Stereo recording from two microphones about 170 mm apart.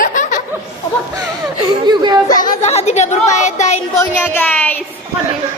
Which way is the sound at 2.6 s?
40° left (ahead or behind).